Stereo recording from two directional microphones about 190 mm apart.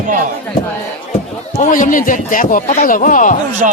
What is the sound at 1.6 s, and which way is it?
Speech, 45° left (ahead or behind).